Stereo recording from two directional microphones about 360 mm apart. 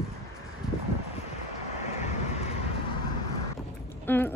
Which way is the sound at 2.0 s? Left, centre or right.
Centre.